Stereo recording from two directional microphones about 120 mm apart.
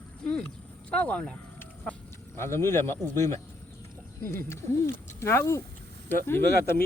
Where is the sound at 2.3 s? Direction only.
20° left (ahead or behind).